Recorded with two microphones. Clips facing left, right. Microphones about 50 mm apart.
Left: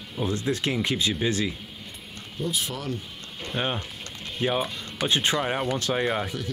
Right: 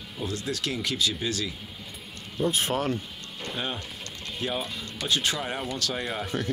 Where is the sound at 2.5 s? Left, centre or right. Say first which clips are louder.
Right 4 dB; right.